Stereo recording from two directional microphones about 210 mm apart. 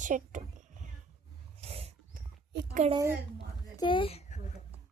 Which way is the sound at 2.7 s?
30° right (ahead or behind).